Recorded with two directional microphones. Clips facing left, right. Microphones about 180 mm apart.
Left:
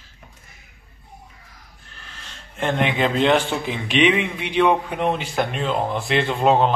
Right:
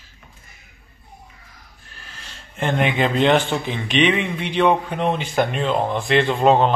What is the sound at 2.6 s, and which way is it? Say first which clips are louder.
A man's voice: right 1 dB; centre (ahead or behind).